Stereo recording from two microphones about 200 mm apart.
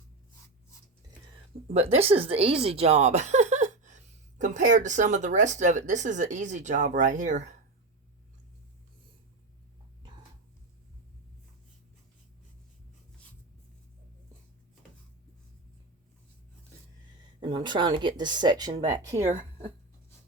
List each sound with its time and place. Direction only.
1.7 s speech: 30° right (ahead or behind)
17.4 s speech: 25° right (ahead or behind)
19.1 s speech: 35° right (ahead or behind)